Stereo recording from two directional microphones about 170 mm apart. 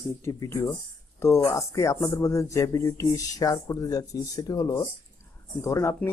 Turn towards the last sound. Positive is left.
turn(degrees=15)  # may be behind; listen again after turning